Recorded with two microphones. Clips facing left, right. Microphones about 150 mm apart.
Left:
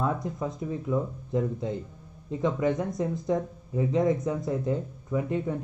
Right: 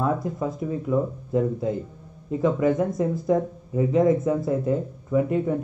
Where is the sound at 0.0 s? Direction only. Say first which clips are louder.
Right 4 dB; 25° right (ahead or behind).